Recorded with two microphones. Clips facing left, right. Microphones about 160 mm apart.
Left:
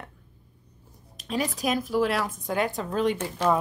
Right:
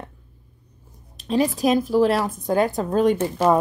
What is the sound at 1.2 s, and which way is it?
A woman's voice, 30° right (ahead or behind).